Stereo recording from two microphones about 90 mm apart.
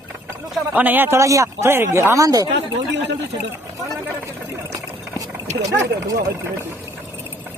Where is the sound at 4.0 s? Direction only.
25° right (ahead or behind).